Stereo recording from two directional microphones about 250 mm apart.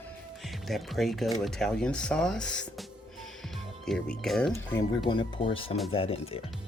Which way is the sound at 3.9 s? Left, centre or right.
Centre.